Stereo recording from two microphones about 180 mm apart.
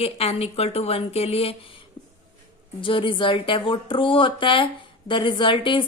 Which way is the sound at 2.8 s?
30° left (ahead or behind).